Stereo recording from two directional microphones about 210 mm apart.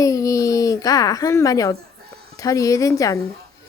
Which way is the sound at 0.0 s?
15° left (ahead or behind).